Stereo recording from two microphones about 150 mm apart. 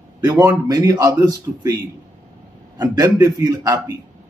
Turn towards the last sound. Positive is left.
turn(degrees=-20)  # may be behind; listen again after turning